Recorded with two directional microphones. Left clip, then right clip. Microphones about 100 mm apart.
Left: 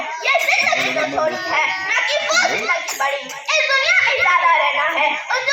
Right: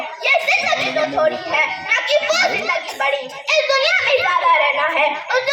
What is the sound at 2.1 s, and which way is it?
Children playing, 25° left (ahead or behind).